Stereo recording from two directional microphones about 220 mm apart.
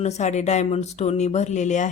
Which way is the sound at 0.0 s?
30° left (ahead or behind).